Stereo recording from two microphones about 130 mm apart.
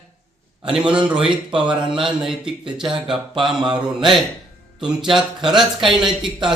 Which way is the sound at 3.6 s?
35° right (ahead or behind).